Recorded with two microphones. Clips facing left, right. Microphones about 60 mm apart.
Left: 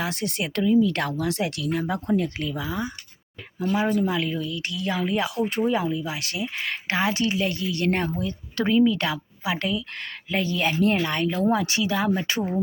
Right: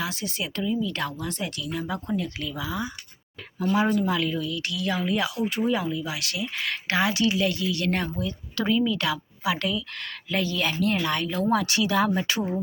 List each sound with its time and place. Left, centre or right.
0.0 s speech: left
2.0 s speech: left
3.8 s speech: left
5.3 s speech: left
5.7 s speech: left
11.9 s speech: centre